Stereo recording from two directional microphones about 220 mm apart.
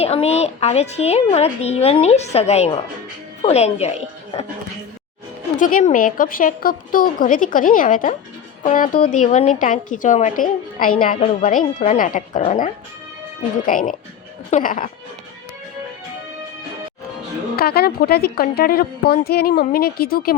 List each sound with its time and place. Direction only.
0.0 s a woman's voice: 30° left (ahead or behind)
5.5 s a woman's voice: 35° left (ahead or behind)
17.6 s a woman's voice: 45° left (ahead or behind)